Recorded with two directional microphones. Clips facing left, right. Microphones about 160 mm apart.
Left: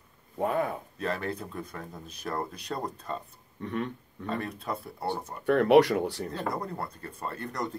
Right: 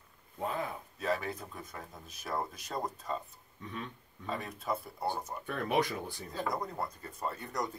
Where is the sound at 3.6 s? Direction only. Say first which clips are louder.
Left 10 dB; 60° left (ahead or behind).